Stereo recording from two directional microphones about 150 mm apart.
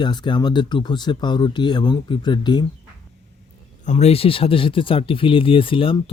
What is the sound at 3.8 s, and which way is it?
Speech, 50° left (ahead or behind).